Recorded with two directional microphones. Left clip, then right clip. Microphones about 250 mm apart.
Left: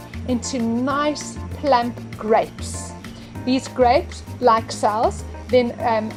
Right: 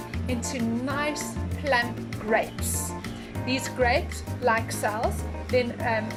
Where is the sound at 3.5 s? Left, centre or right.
Centre.